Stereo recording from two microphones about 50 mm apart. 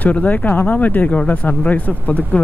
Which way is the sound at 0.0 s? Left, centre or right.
Left.